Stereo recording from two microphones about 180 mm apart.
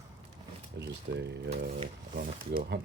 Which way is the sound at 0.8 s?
70° right (ahead or behind).